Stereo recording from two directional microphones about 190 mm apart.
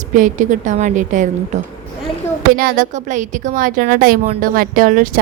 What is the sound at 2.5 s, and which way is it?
A woman's voice, 50° right (ahead or behind).